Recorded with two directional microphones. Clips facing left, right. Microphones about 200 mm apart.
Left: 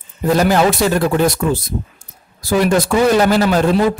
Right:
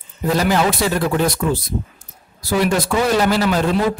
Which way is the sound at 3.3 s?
50° left (ahead or behind).